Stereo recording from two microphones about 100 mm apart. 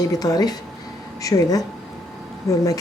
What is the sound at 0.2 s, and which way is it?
A woman's voice, 40° left (ahead or behind).